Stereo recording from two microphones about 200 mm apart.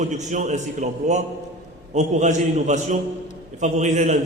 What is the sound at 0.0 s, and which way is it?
A man's voice, 35° right (ahead or behind).